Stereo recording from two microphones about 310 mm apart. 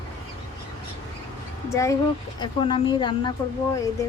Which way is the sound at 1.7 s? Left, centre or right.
Centre.